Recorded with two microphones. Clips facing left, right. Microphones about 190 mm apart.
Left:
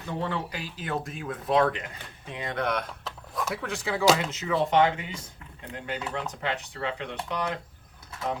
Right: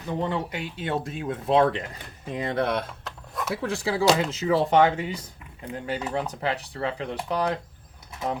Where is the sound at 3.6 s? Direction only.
30° right (ahead or behind).